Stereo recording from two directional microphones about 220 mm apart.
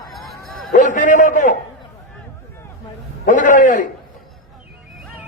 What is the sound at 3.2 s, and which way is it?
Speech, 35° left (ahead or behind).